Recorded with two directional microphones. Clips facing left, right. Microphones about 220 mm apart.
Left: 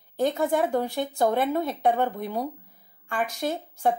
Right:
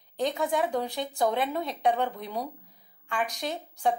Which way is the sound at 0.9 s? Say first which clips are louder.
Left 3 dB; 50° left (ahead or behind).